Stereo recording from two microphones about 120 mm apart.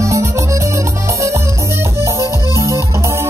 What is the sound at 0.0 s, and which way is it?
Music, 25° right (ahead or behind).